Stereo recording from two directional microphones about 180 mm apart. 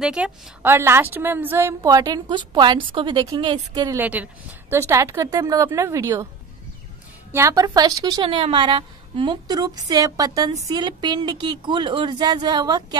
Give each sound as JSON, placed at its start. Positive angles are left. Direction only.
{"t": 0.0, "sound": "a woman's voice", "side_deg": -5}
{"t": 7.3, "sound": "a woman's voice", "side_deg": -20}